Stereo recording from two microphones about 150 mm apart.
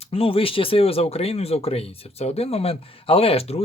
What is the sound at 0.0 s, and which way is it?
Speech, 40° left (ahead or behind).